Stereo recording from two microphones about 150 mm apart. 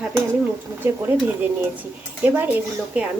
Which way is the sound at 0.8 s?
15° right (ahead or behind).